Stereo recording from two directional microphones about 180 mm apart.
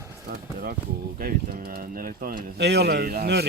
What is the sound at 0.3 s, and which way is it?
Speech, 55° right (ahead or behind).